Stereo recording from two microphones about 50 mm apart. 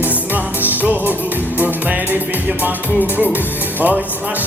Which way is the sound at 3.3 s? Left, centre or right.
Right.